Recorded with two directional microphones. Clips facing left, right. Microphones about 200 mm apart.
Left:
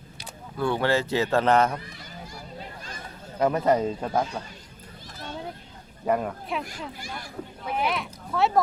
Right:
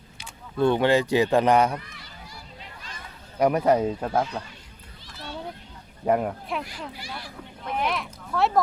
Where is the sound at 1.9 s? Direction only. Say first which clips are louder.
Left 4 dB; 45° left (ahead or behind).